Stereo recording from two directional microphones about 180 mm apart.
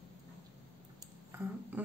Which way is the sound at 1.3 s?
10° right (ahead or behind).